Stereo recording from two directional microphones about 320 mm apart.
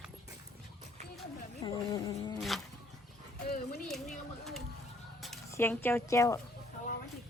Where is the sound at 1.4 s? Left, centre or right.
Centre.